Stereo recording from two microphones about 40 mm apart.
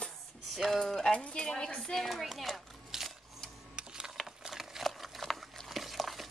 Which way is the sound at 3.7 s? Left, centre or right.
Centre.